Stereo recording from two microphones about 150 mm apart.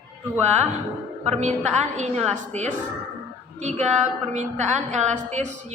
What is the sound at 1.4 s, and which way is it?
A woman's voice, 50° right (ahead or behind).